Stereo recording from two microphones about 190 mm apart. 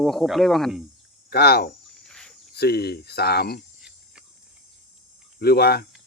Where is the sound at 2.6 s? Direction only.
55° left (ahead or behind).